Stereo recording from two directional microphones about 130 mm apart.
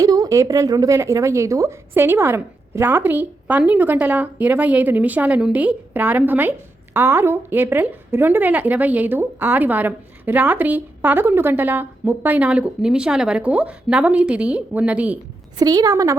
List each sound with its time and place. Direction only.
0.0 s a woman's voice: 30° right (ahead or behind); by 15.2 s 10° right (ahead or behind)
15.5 s a woman's voice: 30° right (ahead or behind)